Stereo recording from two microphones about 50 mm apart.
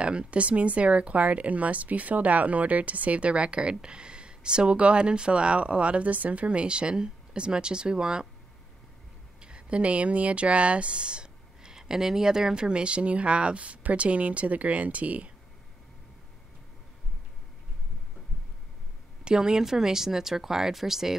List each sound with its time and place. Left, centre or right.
0.0 s speech: right
9.4 s speech: right
19.2 s speech: centre